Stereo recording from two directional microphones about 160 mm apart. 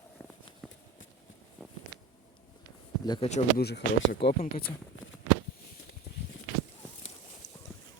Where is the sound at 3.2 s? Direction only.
40° left (ahead or behind).